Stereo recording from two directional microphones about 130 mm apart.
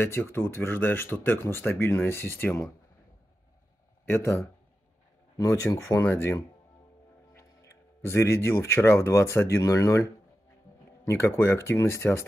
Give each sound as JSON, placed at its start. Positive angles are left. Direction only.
{"t": 0.0, "sound": "speech", "side_deg": 15}
{"t": 4.1, "sound": "speech", "side_deg": 20}
{"t": 11.1, "sound": "speech", "side_deg": 20}